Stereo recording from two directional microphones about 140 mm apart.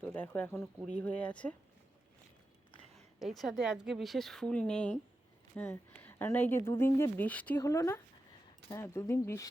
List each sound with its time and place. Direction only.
0.0 s speech: 10° left (ahead or behind)
2.9 s a sound: centre (ahead or behind)
3.6 s speech: 5° right (ahead or behind); by 7.6 s 10° left (ahead or behind)
7.6 s speech: 20° left (ahead or behind)